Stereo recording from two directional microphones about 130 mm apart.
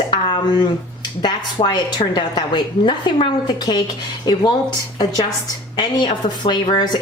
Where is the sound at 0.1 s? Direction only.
35° left (ahead or behind).